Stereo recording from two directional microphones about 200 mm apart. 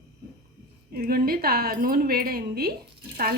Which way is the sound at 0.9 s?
50° right (ahead or behind).